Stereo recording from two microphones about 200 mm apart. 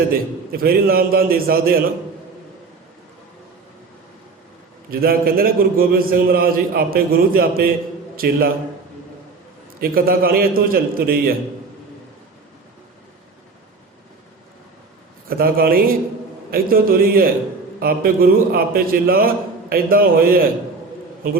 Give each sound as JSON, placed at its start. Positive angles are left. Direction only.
{"t": 0.1, "sound": "a man's voice", "side_deg": -50}
{"t": 4.9, "sound": "a man's voice", "side_deg": -50}
{"t": 9.8, "sound": "a man's voice", "side_deg": -50}
{"t": 15.3, "sound": "a man's voice", "side_deg": -50}